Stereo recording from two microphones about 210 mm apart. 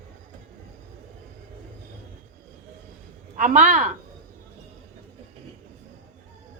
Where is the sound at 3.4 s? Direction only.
35° right (ahead or behind).